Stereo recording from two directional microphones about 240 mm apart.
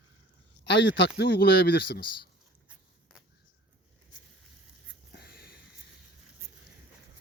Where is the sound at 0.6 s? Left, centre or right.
Left.